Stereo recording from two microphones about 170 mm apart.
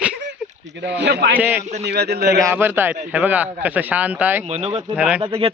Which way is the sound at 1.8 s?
75° right (ahead or behind).